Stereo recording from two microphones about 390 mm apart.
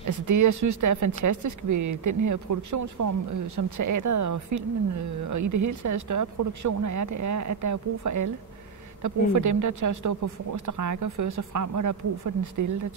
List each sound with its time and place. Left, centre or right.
0.0 s speech: right
9.3 s speech: right